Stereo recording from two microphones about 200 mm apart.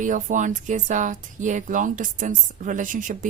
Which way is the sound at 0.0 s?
40° right (ahead or behind).